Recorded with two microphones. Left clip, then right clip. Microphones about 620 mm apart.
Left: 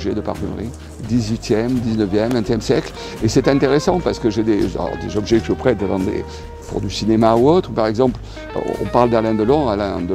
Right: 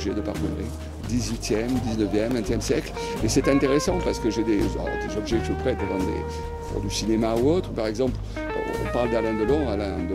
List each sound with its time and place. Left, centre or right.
1.1 s speech: left
7.0 s speech: left
8.6 s speech: centre
8.9 s speech: left